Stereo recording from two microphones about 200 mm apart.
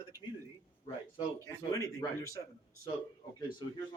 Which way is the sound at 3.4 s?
20° left (ahead or behind).